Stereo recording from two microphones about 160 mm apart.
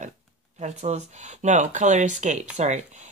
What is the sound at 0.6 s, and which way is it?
Speech, 45° right (ahead or behind).